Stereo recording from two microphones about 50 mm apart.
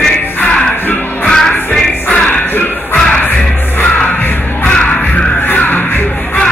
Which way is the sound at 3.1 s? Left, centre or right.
Left.